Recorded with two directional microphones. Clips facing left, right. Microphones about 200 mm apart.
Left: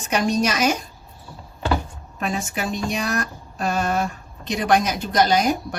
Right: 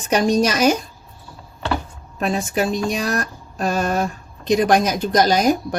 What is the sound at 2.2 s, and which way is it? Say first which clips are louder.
Speech: right 5 dB; 35° right (ahead or behind).